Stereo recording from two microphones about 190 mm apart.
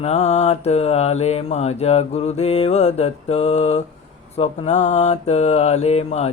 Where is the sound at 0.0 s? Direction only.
35° left (ahead or behind).